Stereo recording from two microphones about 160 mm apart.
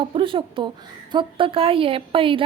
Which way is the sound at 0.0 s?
35° right (ahead or behind).